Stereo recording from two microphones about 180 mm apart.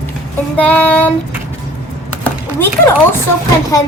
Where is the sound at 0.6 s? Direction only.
10° left (ahead or behind).